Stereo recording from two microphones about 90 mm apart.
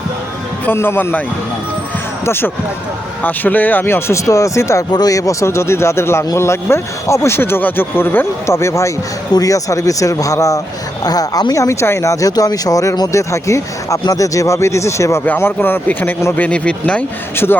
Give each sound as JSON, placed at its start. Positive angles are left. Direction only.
{"t": 0.6, "sound": "speech", "side_deg": 25}
{"t": 2.2, "sound": "speech", "side_deg": 25}
{"t": 4.9, "sound": "speech", "side_deg": 45}
{"t": 15.2, "sound": "speech", "side_deg": 20}
{"t": 17.3, "sound": "speech", "side_deg": 25}